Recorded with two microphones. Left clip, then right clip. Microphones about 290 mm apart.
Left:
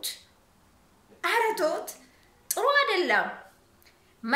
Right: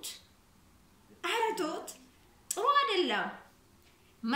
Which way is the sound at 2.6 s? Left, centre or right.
Left.